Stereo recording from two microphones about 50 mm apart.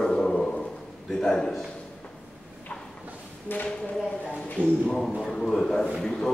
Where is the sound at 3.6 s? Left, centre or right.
Centre.